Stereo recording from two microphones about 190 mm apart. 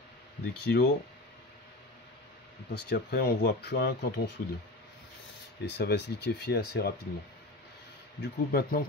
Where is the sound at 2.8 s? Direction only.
60° left (ahead or behind).